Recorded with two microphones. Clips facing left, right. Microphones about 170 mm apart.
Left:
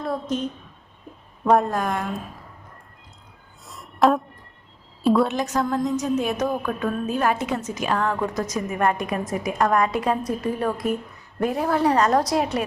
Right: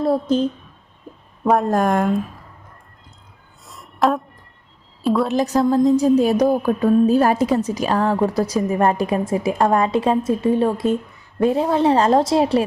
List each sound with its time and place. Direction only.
0.0 s speech: 30° right (ahead or behind)
1.5 s a woman's voice: centre (ahead or behind)
1.7 s speech: 45° right (ahead or behind)
3.7 s a sound: centre (ahead or behind)
5.0 s a woman's voice: centre (ahead or behind)
5.3 s a woman's voice: 35° right (ahead or behind)